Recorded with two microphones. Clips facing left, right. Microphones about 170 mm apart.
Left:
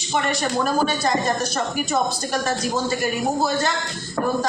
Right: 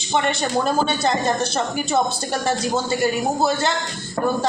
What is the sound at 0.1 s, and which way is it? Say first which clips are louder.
Speech: right 2 dB; 25° right (ahead or behind).